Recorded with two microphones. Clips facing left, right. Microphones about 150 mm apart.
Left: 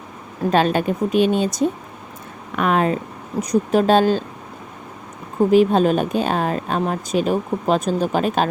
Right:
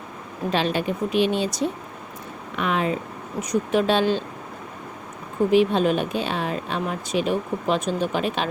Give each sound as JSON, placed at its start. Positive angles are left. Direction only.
{"t": 0.5, "sound": "speech", "side_deg": 45}
{"t": 5.5, "sound": "speech", "side_deg": 40}